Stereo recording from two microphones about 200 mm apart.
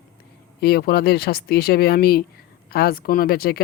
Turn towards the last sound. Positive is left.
turn(degrees=50)  # may be behind; listen again after turning